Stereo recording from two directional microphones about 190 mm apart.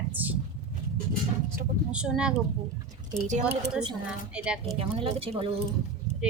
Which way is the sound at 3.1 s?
40° right (ahead or behind).